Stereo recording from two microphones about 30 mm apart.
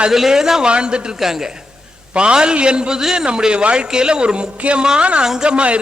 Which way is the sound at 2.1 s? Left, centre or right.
Right.